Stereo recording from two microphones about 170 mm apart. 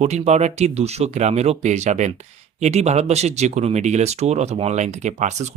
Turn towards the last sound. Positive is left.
turn(degrees=-45)  # may be behind; listen again after turning